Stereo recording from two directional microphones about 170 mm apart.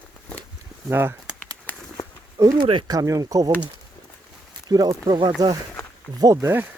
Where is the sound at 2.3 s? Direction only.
20° right (ahead or behind).